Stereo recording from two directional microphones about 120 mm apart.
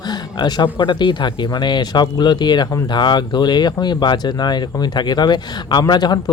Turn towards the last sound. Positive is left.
turn(degrees=35)  # may be behind; listen again after turning